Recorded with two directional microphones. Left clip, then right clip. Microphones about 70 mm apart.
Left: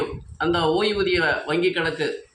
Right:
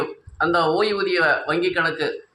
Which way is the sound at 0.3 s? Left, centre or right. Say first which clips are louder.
Right 2 dB; right.